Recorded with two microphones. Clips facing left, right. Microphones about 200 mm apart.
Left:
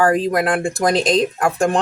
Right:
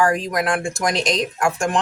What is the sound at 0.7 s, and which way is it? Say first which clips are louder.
Speech: left 4 dB; 60° left (ahead or behind).